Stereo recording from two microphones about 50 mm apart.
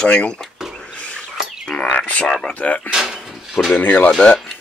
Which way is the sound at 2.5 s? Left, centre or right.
Left.